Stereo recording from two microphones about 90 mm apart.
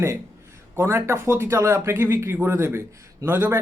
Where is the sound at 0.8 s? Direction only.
30° right (ahead or behind).